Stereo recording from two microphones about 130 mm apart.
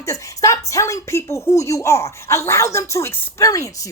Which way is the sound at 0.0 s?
25° left (ahead or behind).